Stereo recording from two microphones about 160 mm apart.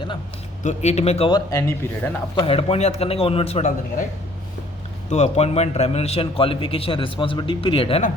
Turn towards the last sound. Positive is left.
turn(degrees=35)  # may be behind; listen again after turning